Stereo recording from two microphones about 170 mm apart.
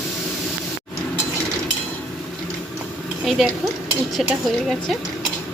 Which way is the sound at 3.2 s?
Centre (ahead or behind).